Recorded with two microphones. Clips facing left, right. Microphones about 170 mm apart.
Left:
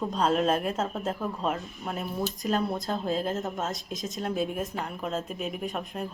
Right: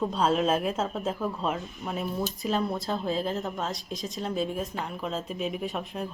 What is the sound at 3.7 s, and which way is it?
Speech, 45° left (ahead or behind).